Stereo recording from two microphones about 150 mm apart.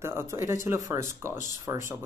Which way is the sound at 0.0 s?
15° right (ahead or behind).